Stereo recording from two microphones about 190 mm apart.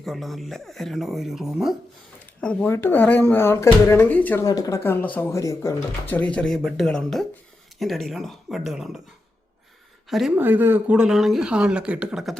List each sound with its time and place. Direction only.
0.0 s speech: centre (ahead or behind)
4.4 s speech: 20° left (ahead or behind); by 9.0 s centre (ahead or behind)
10.1 s speech: centre (ahead or behind)